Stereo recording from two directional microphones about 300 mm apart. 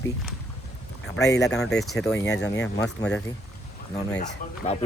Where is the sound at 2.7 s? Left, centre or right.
Centre.